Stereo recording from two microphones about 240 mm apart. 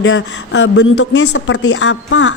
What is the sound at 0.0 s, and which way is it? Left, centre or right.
A woman's voice, left.